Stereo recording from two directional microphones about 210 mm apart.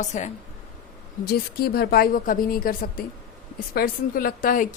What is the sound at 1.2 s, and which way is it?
A woman's voice, 45° left (ahead or behind).